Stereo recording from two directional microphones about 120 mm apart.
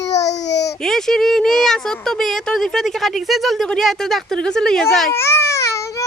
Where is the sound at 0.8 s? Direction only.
5° left (ahead or behind).